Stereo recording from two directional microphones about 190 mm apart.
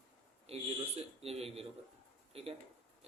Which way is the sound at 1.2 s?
30° right (ahead or behind).